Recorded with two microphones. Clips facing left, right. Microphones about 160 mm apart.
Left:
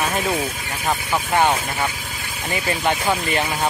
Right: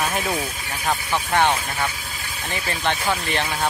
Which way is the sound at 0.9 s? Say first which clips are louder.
Left 1 dB; 5° left (ahead or behind).